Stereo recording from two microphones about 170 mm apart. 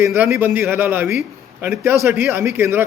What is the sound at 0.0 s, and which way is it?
A man's voice, 15° right (ahead or behind).